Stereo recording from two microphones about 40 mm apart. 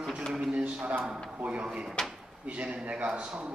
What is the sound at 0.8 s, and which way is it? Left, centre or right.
Speech, right.